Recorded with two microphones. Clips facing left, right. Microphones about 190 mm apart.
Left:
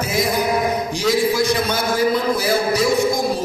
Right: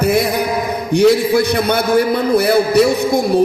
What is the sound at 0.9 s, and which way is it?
Music, 60° right (ahead or behind).